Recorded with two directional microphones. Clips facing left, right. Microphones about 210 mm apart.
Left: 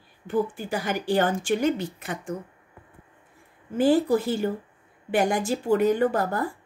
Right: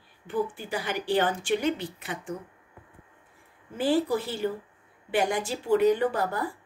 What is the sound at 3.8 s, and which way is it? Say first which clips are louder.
A woman's voice: left 5 dB; 45° left (ahead or behind).